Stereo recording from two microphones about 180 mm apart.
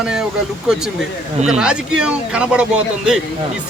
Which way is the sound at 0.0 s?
5° right (ahead or behind).